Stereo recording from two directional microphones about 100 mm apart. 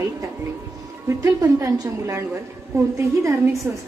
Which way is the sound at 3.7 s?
20° right (ahead or behind).